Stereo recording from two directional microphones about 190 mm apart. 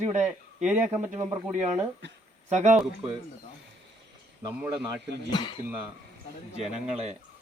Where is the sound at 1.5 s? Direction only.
40° right (ahead or behind).